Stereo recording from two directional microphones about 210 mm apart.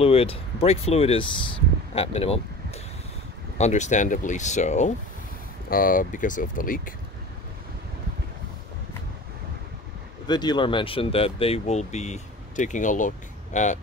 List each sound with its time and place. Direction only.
0.0 s speech: 25° left (ahead or behind)
10.2 s speech: 20° left (ahead or behind); by 13.7 s 35° left (ahead or behind)